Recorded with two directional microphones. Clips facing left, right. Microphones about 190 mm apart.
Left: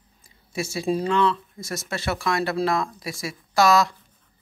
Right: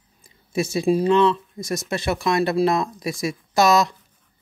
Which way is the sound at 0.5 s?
20° right (ahead or behind).